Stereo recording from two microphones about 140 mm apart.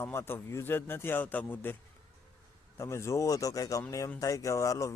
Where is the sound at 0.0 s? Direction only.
15° left (ahead or behind).